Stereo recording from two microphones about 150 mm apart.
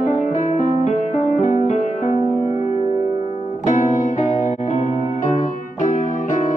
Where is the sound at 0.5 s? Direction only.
50° left (ahead or behind).